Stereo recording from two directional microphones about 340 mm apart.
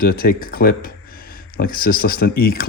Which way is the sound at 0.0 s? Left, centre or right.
Left.